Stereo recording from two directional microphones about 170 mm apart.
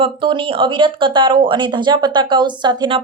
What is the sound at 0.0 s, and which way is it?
Speech, 30° right (ahead or behind).